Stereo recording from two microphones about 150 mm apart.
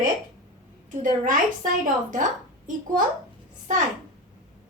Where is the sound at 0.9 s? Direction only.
60° right (ahead or behind).